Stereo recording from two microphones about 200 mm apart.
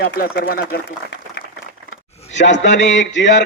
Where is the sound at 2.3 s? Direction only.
65° left (ahead or behind).